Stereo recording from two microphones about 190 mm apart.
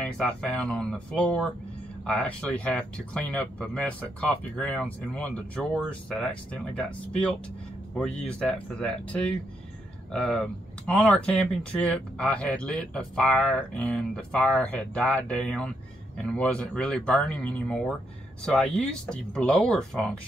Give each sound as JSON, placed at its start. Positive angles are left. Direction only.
{"t": 0.0, "sound": "speech", "side_deg": 5}